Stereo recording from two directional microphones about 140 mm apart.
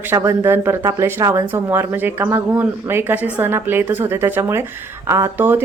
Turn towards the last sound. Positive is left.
turn(degrees=-15)  # may be behind; listen again after turning